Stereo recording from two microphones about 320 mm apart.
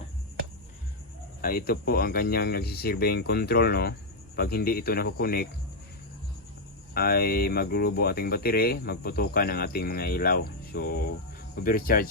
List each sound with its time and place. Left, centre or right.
1.4 s speech: left
6.9 s speech: left